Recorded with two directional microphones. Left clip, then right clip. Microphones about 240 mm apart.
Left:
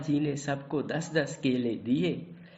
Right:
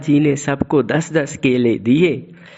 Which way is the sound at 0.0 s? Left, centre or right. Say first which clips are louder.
Right 14 dB; right.